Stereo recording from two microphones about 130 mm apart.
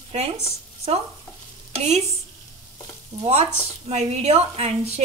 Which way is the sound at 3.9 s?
55° right (ahead or behind).